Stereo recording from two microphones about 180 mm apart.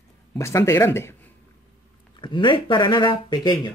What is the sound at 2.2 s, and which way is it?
Speech, 25° left (ahead or behind).